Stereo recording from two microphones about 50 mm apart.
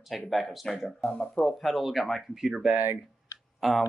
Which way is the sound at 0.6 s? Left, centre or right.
Centre.